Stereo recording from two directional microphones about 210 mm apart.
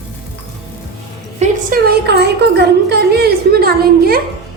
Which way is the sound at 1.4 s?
45° right (ahead or behind).